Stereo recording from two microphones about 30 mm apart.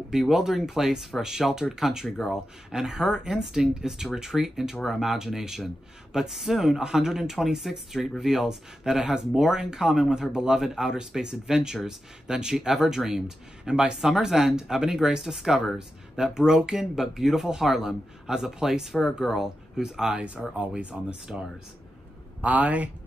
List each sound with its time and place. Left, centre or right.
0.1 s speech: centre
2.0 s speech: centre
2.3 s speech: centre
20.2 s speech: right
20.9 s speech: right
22.4 s a man's voice: right